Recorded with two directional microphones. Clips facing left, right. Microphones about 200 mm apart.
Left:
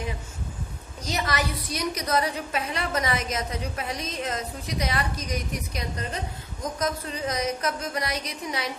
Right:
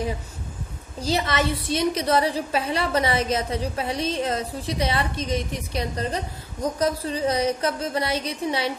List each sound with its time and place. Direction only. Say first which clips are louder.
1.0 s a woman's voice: right 5 dB; 25° right (ahead or behind)